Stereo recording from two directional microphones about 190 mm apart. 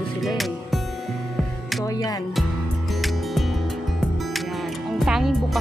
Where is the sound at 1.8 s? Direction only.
20° left (ahead or behind).